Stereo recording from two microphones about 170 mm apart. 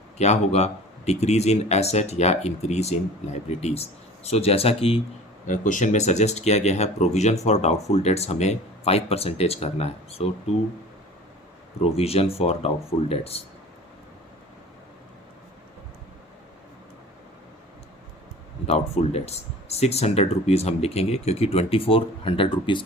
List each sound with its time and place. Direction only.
0.2 s speech: 40° left (ahead or behind)
5.5 s speech: 50° left (ahead or behind)
11.9 s speech: 35° left (ahead or behind)
18.6 s speech: 35° left (ahead or behind)